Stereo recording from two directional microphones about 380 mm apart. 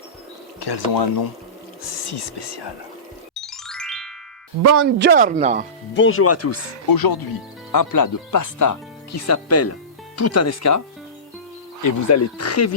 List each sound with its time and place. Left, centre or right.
0.6 s speech: left
3.4 s music: centre
4.6 s speech: right; by 5.6 s centre
5.9 s speech: left
6.8 s speech: left
7.7 s speech: left